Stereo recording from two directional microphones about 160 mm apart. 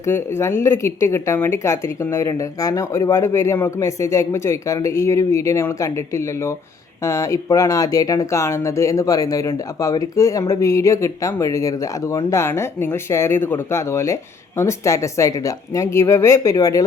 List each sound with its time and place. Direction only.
0.1 s a woman's voice: 15° left (ahead or behind)